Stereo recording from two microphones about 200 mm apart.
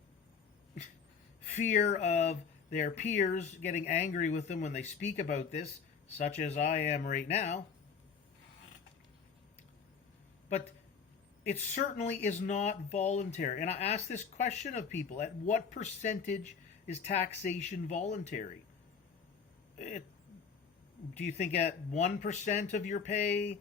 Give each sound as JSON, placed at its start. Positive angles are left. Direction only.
{"t": 1.5, "sound": "speech", "side_deg": 35}
{"t": 11.4, "sound": "speech", "side_deg": 40}
{"t": 19.8, "sound": "speech", "side_deg": 40}
{"t": 21.2, "sound": "speech", "side_deg": 35}